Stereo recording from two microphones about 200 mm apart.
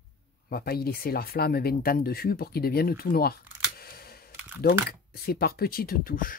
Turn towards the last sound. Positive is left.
turn(degrees=45)  # may be behind; listen again after turning